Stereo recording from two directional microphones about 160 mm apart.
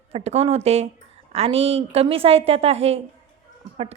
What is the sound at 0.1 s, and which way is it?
A woman's voice, 40° right (ahead or behind).